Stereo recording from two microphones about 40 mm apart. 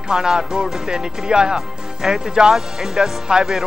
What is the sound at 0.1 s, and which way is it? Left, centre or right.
Speech, centre.